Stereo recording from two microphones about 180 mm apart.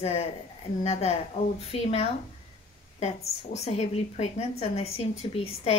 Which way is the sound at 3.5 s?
35° left (ahead or behind).